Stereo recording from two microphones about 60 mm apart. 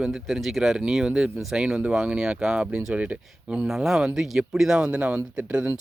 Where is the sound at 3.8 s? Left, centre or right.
Centre.